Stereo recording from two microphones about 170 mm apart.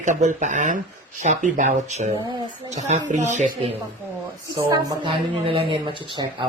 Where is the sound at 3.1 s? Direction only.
45° right (ahead or behind).